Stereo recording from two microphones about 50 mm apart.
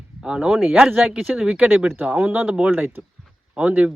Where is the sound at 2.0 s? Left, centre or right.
Right.